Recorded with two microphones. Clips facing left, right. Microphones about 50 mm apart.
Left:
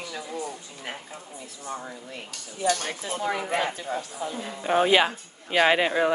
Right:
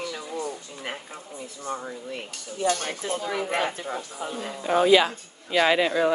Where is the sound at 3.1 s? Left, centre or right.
Left.